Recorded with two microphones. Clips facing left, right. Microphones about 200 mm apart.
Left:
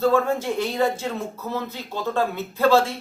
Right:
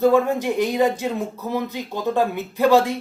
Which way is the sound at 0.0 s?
15° right (ahead or behind).